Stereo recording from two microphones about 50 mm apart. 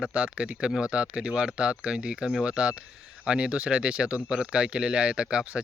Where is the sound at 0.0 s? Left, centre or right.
Right.